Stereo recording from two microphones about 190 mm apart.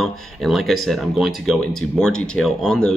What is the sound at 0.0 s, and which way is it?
Speech, centre (ahead or behind).